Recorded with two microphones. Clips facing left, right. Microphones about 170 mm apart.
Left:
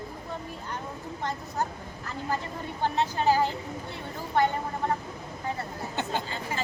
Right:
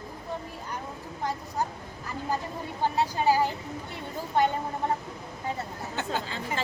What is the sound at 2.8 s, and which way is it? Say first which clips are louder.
Speech: right 1 dB; 10° right (ahead or behind).